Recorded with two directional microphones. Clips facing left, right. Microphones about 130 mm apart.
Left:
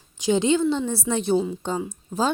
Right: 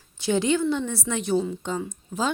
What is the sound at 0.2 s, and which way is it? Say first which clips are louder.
Speech: left 2 dB; 20° left (ahead or behind).